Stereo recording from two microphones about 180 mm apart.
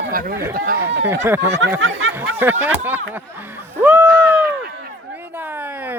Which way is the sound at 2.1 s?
10° right (ahead or behind).